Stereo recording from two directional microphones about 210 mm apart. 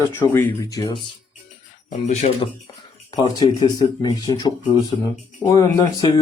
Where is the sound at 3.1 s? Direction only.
20° left (ahead or behind).